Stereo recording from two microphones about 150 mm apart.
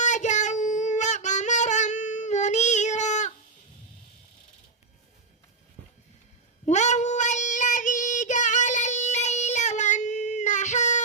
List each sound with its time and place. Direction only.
0.0 s child singing: 50° left (ahead or behind)
6.7 s child singing: 50° left (ahead or behind)